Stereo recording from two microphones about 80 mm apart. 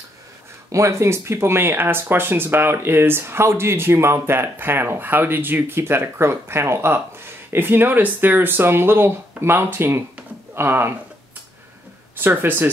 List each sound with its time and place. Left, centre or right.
0.7 s speech: right
12.2 s speech: right